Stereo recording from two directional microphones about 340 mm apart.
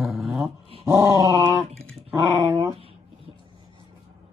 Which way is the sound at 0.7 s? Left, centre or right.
Centre.